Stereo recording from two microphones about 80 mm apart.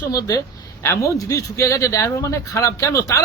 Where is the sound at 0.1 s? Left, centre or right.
Left.